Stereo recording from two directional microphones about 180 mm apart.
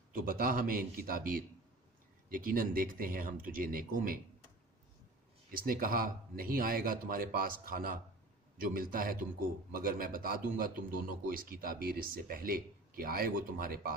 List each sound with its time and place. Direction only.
0.1 s a man's voice: 55° right (ahead or behind)
5.5 s a man's voice: 50° right (ahead or behind)